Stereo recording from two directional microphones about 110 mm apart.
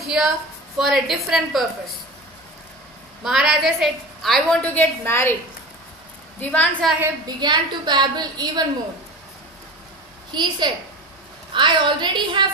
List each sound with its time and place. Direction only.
0.0 s a woman's voice: 5° right (ahead or behind)
3.3 s a woman's voice: 5° right (ahead or behind)
4.6 s a woman's voice: 20° left (ahead or behind)
6.4 s a woman's voice: 10° left (ahead or behind)
7.2 s a woman's voice: 40° right (ahead or behind)
10.3 s a woman's voice: 40° right (ahead or behind)